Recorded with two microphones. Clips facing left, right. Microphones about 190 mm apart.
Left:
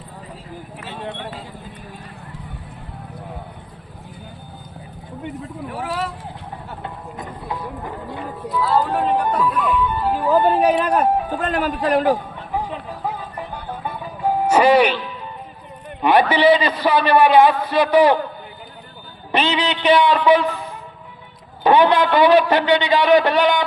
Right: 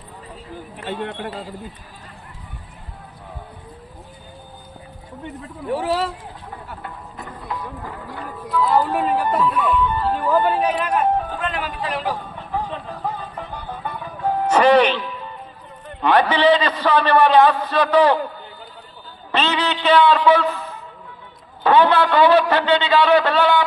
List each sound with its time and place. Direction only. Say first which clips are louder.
5.6 s speech: right 5 dB; 30° right (ahead or behind)
6.7 s clip-clop: left 3 dB; 20° left (ahead or behind)
8.6 s speech: even; 15° right (ahead or behind)
9.5 s music: even; 5° right (ahead or behind); by 10.4 s 15° left (ahead or behind)
10.4 s a man's voice: left 4 dB; 35° left (ahead or behind)
12.5 s music: left 1 dB; 10° left (ahead or behind)
16.0 s a sound: left 1 dB; 10° left (ahead or behind)
16.3 s a man's voice: left 1 dB; 10° left (ahead or behind)
19.3 s a man's voice: left 1 dB; 10° left (ahead or behind)